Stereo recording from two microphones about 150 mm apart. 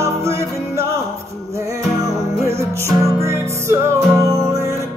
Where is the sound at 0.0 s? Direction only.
20° right (ahead or behind).